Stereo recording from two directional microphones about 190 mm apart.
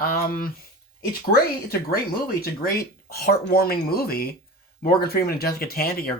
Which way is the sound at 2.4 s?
55° left (ahead or behind).